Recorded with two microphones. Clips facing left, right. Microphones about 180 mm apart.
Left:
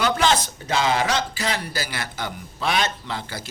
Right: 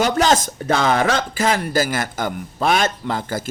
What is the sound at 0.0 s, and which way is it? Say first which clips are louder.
A man's voice: right 4 dB; 45° right (ahead or behind).